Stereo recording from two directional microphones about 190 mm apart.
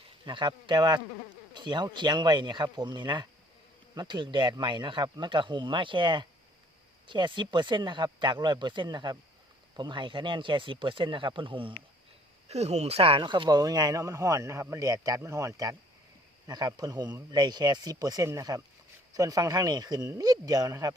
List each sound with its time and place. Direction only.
0.3 s speech: 25° right (ahead or behind)